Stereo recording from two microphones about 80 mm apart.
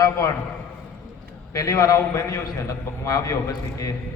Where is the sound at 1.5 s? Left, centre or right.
Left.